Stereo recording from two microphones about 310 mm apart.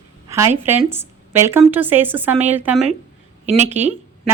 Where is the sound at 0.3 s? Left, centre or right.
Centre.